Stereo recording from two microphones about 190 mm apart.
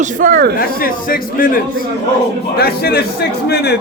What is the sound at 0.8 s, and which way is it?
A man's voice, 50° left (ahead or behind).